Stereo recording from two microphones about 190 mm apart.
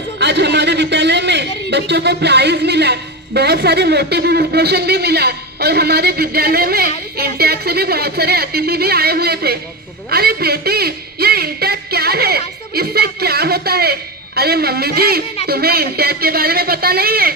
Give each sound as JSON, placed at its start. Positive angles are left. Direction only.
{"t": 0.2, "sound": "a man's voice", "side_deg": -65}